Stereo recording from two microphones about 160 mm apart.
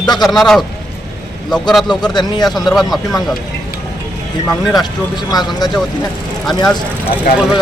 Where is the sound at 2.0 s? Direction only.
25° left (ahead or behind).